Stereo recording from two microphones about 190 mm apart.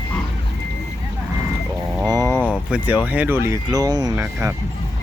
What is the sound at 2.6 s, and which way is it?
Speech, 5° right (ahead or behind).